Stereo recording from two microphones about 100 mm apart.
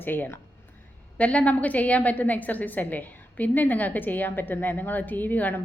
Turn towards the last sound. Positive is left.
turn(degrees=20)  # may be behind; listen again after turning